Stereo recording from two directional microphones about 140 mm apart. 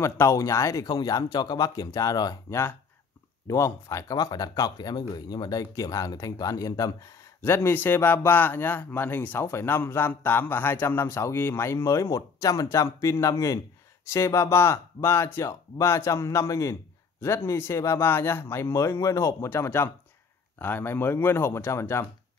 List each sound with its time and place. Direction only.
0.0 s speech: 20° left (ahead or behind)